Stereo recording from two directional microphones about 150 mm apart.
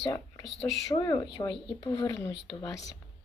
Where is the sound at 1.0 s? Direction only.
25° left (ahead or behind).